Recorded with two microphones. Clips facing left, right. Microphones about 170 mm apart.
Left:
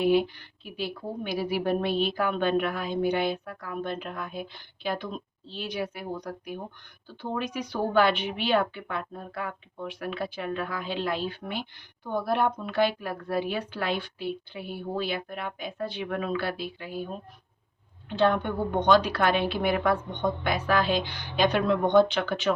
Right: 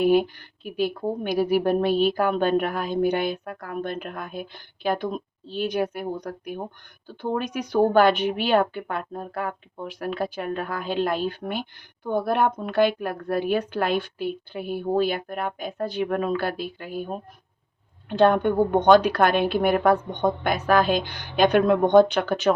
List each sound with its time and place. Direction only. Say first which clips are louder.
0.0 s a woman's voice: right 4 dB; 45° right (ahead or behind)